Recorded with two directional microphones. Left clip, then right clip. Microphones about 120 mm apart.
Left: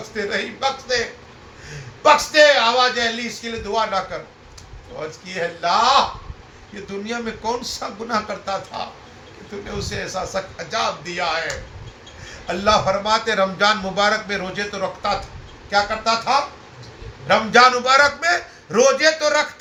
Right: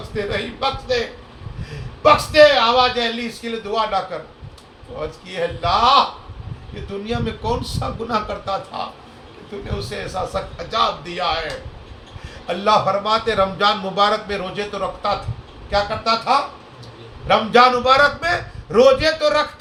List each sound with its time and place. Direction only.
0.1 s speech: 25° right (ahead or behind)
2.3 s speech: 25° right (ahead or behind)
7.0 s speech: 30° right (ahead or behind)
12.5 s speech: 25° right (ahead or behind)
15.7 s speech: 35° right (ahead or behind)
17.2 s speech: 25° right (ahead or behind)